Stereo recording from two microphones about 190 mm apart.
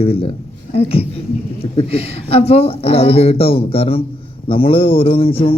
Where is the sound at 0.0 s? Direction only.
30° left (ahead or behind).